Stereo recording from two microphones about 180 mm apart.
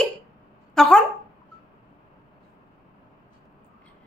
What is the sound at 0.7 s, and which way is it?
Speech, centre (ahead or behind).